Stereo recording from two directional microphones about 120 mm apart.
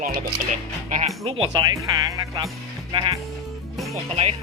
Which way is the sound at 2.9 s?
45° right (ahead or behind).